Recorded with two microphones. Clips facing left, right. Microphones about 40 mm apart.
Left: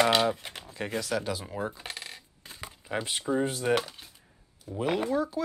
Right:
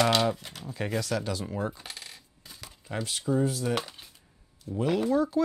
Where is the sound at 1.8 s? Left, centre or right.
Left.